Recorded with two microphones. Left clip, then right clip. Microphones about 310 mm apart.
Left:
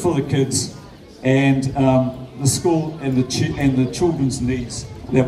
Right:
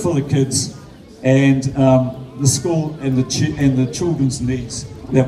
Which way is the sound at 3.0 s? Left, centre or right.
Centre.